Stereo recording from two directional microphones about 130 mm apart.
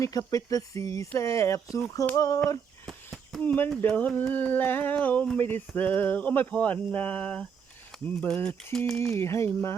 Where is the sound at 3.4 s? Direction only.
10° left (ahead or behind).